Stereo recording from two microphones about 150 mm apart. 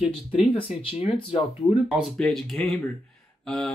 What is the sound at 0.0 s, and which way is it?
Speech, 40° left (ahead or behind).